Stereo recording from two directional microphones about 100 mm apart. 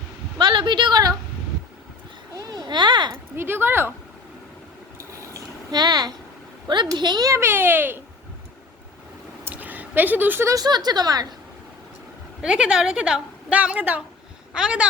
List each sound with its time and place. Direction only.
0.3 s a sound: 55° right (ahead or behind)
2.3 s a sound: 40° right (ahead or behind)
3.3 s a child's voice: 20° right (ahead or behind)
4.9 s vehicle: 30° right (ahead or behind)
5.7 s a woman's voice: 45° right (ahead or behind)
7.3 s a child's voice: 25° right (ahead or behind)
9.4 s a sound: 15° right (ahead or behind)
10.5 s a woman's voice: 45° right (ahead or behind)
12.4 s a woman's voice: 10° right (ahead or behind)